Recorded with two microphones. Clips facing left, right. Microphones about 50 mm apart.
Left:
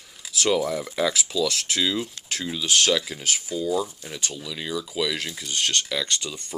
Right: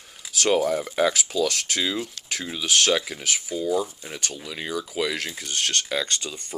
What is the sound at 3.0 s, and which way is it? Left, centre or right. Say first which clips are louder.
Speech: even; right.